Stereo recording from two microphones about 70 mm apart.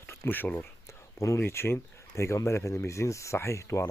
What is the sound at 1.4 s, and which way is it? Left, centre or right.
Speech, left.